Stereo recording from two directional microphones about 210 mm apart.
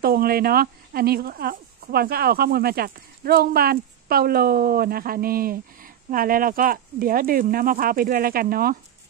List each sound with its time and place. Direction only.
0.0 s speech: 45° right (ahead or behind)